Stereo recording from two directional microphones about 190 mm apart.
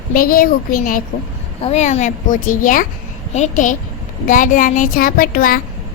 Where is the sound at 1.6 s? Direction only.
35° left (ahead or behind).